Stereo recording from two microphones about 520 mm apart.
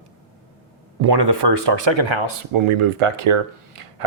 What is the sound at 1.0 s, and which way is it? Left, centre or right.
Speech, right.